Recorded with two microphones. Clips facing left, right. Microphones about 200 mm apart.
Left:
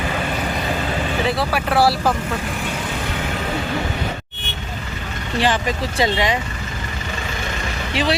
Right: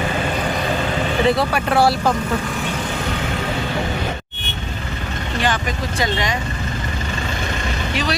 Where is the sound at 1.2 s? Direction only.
5° left (ahead or behind).